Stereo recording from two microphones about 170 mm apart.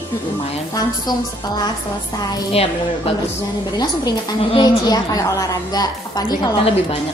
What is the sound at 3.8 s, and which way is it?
A woman's voice, 25° left (ahead or behind).